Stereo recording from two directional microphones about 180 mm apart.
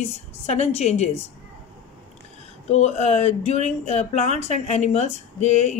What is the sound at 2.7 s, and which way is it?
A woman's voice, 40° left (ahead or behind).